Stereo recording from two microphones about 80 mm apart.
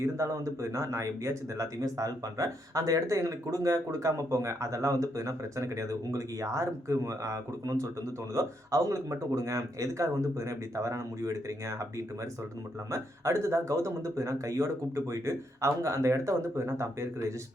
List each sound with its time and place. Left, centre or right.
0.0 s speech: right